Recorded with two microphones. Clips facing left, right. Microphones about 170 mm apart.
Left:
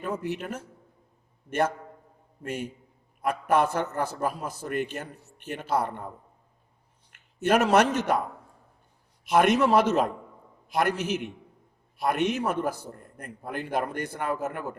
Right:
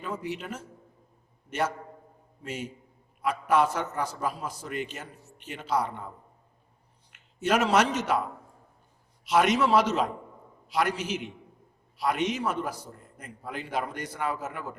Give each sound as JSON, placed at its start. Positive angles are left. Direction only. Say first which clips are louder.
{"t": 0.0, "sound": "a man's voice", "louder": "left 3 dB", "side_deg": 50}
{"t": 7.1, "sound": "a man's voice", "louder": "left 3 dB", "side_deg": 55}
{"t": 9.2, "sound": "a man's voice", "louder": "left 2 dB", "side_deg": 55}